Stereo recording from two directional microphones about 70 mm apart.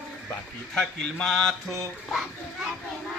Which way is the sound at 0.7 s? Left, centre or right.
Centre.